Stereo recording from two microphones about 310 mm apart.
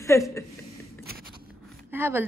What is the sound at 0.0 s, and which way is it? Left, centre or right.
Speech, centre.